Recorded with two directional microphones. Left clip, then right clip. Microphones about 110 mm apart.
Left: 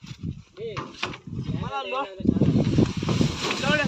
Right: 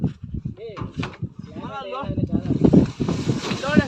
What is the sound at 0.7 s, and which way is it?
Speech, 5° left (ahead or behind).